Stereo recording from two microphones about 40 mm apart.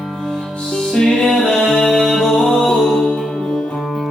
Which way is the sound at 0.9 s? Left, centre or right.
Centre.